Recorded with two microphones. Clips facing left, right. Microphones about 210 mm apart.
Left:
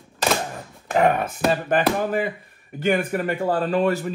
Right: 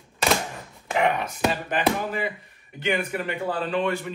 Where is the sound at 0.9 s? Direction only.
45° left (ahead or behind).